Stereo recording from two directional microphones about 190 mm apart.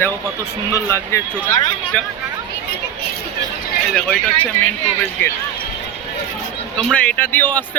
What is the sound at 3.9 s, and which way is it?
Speech, 5° left (ahead or behind).